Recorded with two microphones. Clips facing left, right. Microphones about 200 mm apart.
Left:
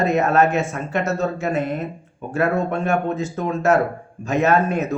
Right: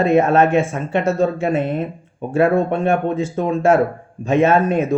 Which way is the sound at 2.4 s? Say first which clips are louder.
Right 5 dB; 30° right (ahead or behind).